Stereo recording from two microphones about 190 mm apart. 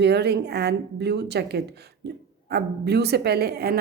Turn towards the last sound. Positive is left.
turn(degrees=-55)  # may be behind; listen again after turning